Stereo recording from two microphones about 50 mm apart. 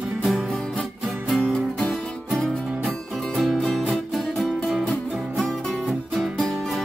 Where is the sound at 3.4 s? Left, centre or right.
Centre.